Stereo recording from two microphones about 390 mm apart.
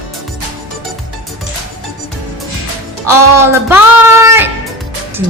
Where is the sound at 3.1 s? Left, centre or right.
Centre.